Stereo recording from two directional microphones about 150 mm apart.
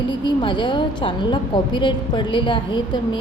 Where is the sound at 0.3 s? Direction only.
30° left (ahead or behind).